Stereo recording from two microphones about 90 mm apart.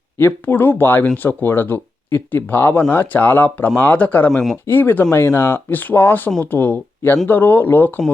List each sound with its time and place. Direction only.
0.2 s speech: 25° left (ahead or behind)
4.3 s speech: centre (ahead or behind)
4.6 s speech: 20° left (ahead or behind)